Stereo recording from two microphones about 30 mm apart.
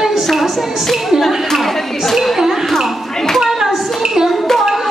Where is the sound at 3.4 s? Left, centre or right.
Centre.